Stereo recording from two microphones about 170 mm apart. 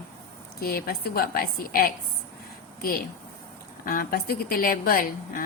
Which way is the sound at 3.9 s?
60° left (ahead or behind).